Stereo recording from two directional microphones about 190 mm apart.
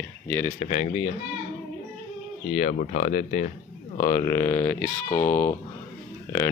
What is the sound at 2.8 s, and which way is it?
Speech, 35° left (ahead or behind).